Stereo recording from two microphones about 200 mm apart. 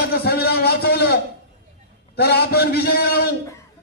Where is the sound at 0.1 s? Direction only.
50° left (ahead or behind).